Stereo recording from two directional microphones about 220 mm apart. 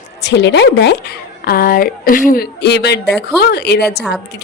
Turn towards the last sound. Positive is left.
turn(degrees=45)  # may be behind; listen again after turning